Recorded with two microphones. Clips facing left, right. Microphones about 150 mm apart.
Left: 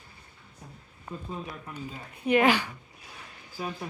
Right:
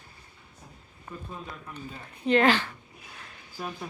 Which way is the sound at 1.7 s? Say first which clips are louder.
Left 2 dB; 15° left (ahead or behind).